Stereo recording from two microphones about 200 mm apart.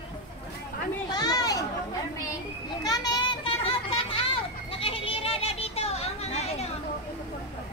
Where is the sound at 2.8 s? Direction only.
20° left (ahead or behind).